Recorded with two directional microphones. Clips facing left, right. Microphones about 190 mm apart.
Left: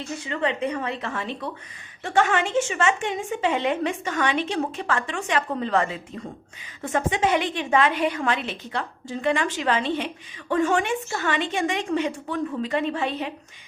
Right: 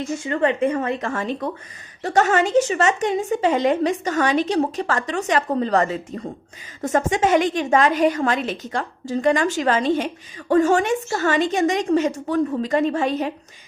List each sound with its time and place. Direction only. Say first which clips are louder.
0.3 s a woman's voice: right 6 dB; 50° right (ahead or behind)